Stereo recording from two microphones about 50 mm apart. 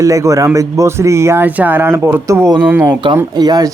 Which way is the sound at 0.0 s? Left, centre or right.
Right.